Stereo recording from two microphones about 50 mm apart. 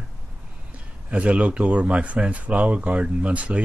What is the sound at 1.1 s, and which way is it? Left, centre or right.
Speech, right.